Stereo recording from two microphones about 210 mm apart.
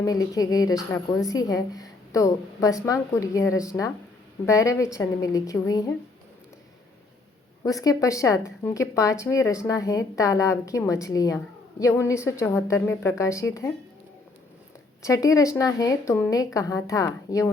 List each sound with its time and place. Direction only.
0.0 s a woman's voice: 15° left (ahead or behind)
7.6 s a woman's voice: 15° left (ahead or behind)
15.0 s a woman's voice: 15° left (ahead or behind)